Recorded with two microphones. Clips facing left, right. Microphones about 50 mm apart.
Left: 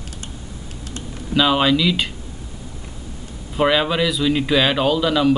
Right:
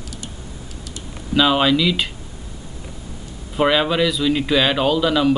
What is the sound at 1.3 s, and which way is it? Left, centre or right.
Speech, centre.